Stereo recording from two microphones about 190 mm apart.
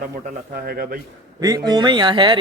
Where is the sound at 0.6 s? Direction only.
50° right (ahead or behind).